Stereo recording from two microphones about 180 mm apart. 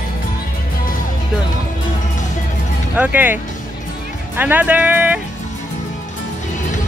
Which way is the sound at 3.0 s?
10° right (ahead or behind).